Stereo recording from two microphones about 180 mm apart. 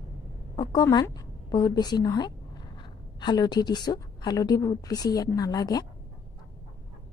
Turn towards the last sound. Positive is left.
turn(degrees=20)  # may be behind; listen again after turning